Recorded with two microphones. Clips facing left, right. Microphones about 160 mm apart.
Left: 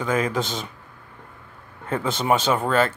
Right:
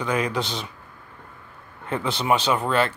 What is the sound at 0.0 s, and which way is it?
Speech, 45° left (ahead or behind).